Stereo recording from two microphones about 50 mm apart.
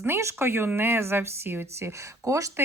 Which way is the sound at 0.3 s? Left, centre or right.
Right.